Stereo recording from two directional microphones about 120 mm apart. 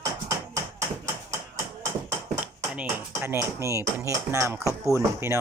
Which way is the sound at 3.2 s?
20° right (ahead or behind).